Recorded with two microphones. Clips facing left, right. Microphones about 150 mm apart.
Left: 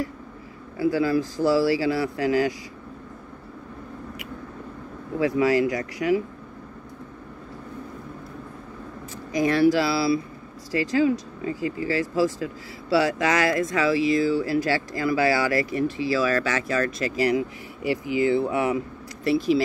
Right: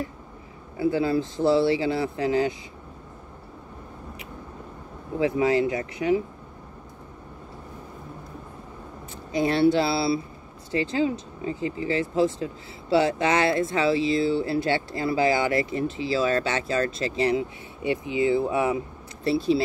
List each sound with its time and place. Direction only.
0.7 s speech: 25° right (ahead or behind)
5.2 s speech: 25° right (ahead or behind)
9.3 s speech: 25° right (ahead or behind)